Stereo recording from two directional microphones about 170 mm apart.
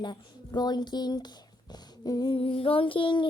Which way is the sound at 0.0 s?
25° left (ahead or behind).